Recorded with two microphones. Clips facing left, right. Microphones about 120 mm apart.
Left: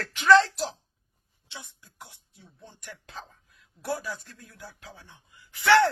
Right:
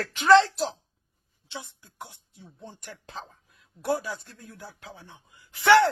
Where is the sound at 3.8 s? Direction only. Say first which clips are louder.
Right 4 dB; 20° right (ahead or behind).